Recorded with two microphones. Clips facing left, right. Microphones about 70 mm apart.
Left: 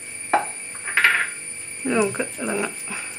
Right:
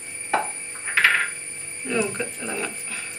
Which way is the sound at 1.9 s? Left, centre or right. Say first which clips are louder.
Left 3 dB; centre.